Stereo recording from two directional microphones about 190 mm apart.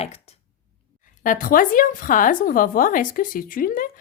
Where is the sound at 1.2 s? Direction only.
45° left (ahead or behind).